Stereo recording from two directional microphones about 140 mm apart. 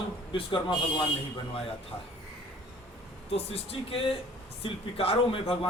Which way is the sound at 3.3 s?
45° left (ahead or behind).